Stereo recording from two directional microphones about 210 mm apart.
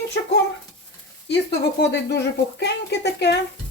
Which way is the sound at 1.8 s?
55° left (ahead or behind).